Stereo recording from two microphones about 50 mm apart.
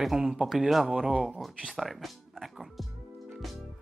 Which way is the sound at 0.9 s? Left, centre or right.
Centre.